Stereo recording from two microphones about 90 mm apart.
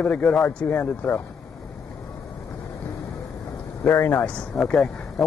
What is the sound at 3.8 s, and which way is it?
Speech, 25° left (ahead or behind).